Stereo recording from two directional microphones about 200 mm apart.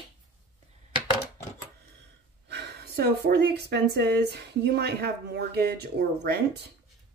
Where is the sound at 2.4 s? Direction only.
55° right (ahead or behind).